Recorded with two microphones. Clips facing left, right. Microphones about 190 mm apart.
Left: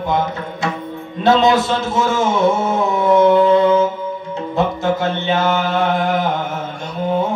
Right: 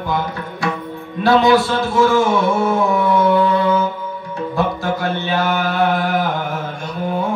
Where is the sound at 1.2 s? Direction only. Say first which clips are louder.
Even; 20° left (ahead or behind).